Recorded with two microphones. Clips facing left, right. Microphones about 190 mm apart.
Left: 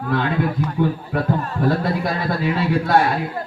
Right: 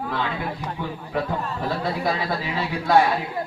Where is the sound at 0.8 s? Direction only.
50° left (ahead or behind).